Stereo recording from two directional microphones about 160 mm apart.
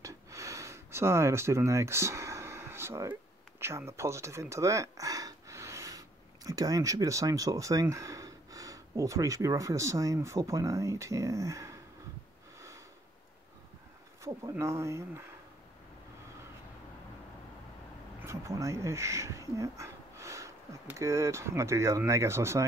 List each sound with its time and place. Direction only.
0.0 s speech: 20° right (ahead or behind)
12.5 s sniff: 20° right (ahead or behind)
14.2 s speech: 20° right (ahead or behind)
18.2 s speech: 20° right (ahead or behind)